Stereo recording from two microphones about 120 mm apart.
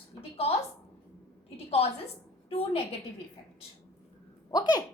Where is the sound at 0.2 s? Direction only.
55° left (ahead or behind).